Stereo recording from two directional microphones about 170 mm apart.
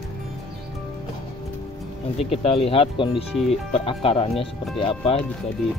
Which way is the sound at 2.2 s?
35° left (ahead or behind).